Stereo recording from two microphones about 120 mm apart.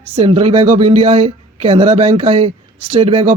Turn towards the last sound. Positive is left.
turn(degrees=-55)  # may be behind; listen again after turning